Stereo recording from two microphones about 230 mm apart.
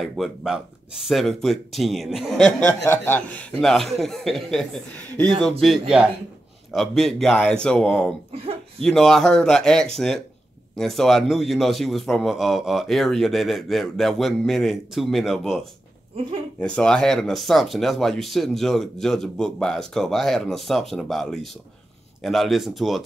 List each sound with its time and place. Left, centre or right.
0.0 s speech: centre
8.3 s a sound: right
8.8 s speech: centre